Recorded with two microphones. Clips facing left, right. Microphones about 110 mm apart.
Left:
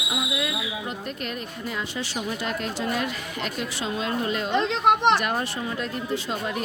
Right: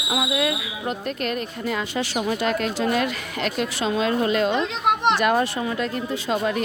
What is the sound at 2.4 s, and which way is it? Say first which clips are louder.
Speech: right 6 dB; 90° right.